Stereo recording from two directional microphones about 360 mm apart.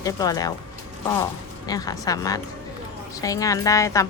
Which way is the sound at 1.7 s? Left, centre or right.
Centre.